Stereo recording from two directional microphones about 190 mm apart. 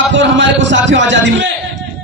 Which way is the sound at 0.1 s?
70° right (ahead or behind).